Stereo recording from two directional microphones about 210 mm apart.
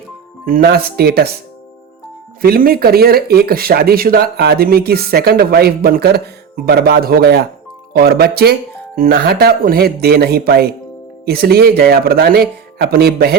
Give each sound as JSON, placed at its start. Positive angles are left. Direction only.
{"t": 0.4, "sound": "speech", "side_deg": -45}
{"t": 2.4, "sound": "speech", "side_deg": -45}